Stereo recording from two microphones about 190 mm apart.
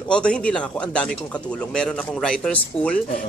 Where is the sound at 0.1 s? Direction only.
5° left (ahead or behind).